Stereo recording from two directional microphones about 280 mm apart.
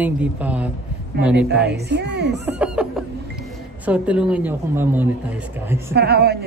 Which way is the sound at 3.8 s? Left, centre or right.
Centre.